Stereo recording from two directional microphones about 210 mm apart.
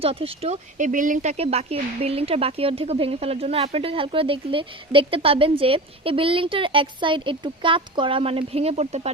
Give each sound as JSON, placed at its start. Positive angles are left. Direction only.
{"t": 0.0, "sound": "speech", "side_deg": -25}